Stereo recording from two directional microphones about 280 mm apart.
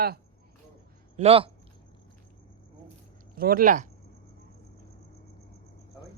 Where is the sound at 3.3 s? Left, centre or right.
Right.